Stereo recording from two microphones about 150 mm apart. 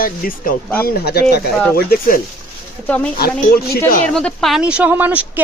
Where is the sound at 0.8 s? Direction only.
90° left.